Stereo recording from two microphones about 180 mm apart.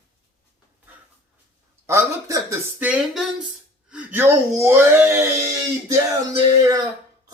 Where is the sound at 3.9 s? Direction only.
10° right (ahead or behind).